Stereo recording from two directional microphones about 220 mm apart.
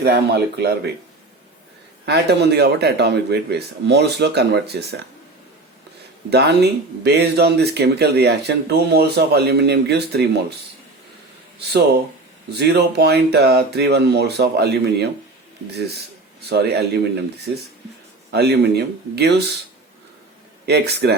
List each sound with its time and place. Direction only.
0.0 s speech: 45° right (ahead or behind)
2.0 s speech: 50° right (ahead or behind)
6.3 s speech: 50° right (ahead or behind)
12.5 s speech: 50° right (ahead or behind)
20.7 s speech: 45° right (ahead or behind)